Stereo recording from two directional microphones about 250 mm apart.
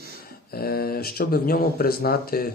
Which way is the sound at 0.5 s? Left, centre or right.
Left.